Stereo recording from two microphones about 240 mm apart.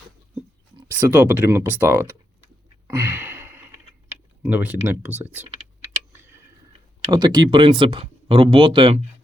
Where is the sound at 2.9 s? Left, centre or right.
Centre.